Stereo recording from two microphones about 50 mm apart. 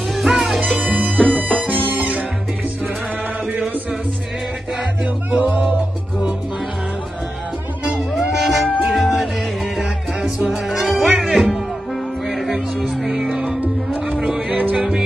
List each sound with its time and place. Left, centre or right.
0.1 s music: centre
0.9 s music: centre
1.2 s music: right
5.3 s music: right
8.1 s music: centre
10.5 s music: centre